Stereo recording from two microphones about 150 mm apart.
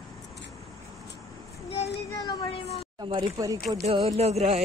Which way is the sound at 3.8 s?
40° right (ahead or behind).